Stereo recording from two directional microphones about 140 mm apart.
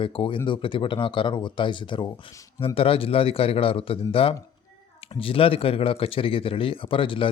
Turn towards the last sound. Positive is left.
turn(degrees=40)  # may be behind; listen again after turning